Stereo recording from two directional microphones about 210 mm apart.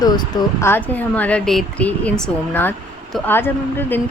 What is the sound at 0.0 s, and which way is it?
Speech, 20° left (ahead or behind).